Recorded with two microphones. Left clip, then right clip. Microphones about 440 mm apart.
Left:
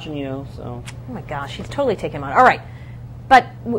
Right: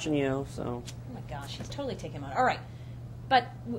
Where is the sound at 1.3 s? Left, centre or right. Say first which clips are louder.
Left 13 dB; left.